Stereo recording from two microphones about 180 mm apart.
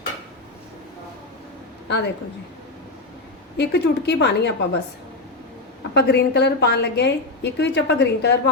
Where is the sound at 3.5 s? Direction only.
70° left (ahead or behind).